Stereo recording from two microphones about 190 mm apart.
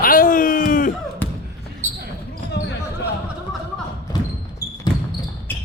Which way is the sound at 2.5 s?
65° left (ahead or behind).